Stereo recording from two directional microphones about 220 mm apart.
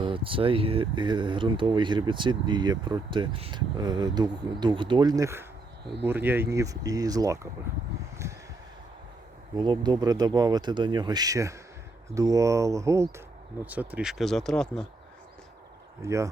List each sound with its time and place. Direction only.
0.0 s speech: 25° right (ahead or behind)
9.6 s speech: 20° right (ahead or behind); by 14.8 s 5° left (ahead or behind)
16.0 s speech: 15° right (ahead or behind)